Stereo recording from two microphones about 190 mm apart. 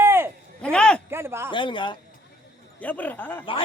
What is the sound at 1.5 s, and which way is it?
Speech, 25° left (ahead or behind).